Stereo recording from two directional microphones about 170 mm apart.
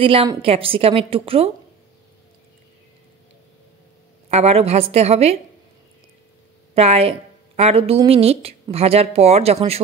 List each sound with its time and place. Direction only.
0.0 s a woman's voice: 30° right (ahead or behind)
4.3 s a woman's voice: 40° right (ahead or behind)
6.7 s a woman's voice: 35° right (ahead or behind)